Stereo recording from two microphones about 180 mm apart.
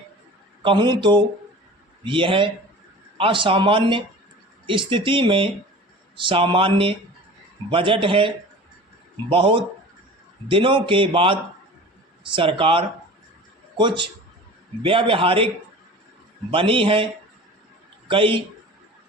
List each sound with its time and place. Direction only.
0.6 s speech: 25° right (ahead or behind)
9.3 s speech: 30° right (ahead or behind)
16.5 s speech: 30° right (ahead or behind)
18.1 s speech: 30° right (ahead or behind)